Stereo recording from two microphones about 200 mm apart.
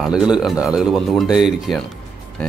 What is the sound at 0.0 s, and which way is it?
Speech, 5° right (ahead or behind).